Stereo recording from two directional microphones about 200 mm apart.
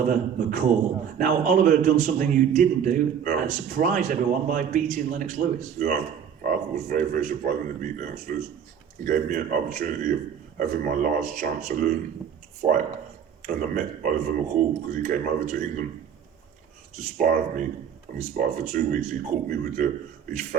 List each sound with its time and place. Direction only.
0.1 s a man's voice: 40° right (ahead or behind)
13.4 s a man's voice: 40° right (ahead or behind)
17.0 s a man's voice: 40° right (ahead or behind)